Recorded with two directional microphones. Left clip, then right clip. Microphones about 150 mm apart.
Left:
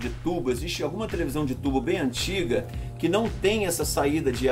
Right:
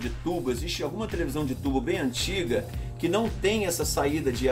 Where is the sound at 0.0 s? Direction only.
5° left (ahead or behind).